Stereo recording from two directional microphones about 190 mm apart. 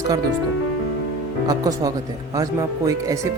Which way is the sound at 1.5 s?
20° right (ahead or behind).